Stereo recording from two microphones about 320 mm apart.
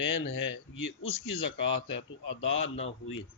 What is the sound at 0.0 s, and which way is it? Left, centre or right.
Speech, left.